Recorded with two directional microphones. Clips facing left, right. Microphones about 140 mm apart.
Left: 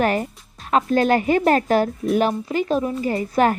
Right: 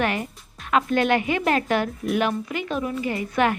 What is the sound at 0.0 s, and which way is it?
Speech, 40° left (ahead or behind).